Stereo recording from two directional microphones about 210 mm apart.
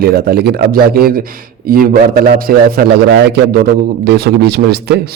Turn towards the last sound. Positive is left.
turn(degrees=-55)  # may be behind; listen again after turning